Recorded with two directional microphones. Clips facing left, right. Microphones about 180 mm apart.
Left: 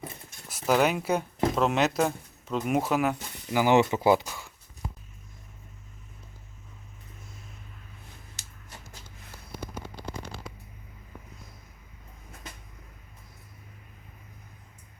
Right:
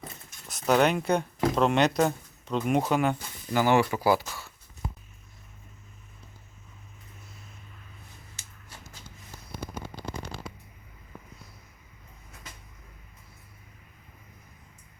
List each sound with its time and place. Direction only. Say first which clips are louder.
0.0 s cutlery: left 3 dB; 5° left (ahead or behind)
1.5 s speech: right 2 dB; centre (ahead or behind)